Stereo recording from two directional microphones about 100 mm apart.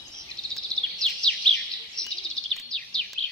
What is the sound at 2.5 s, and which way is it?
Bird vocalization, 5° left (ahead or behind).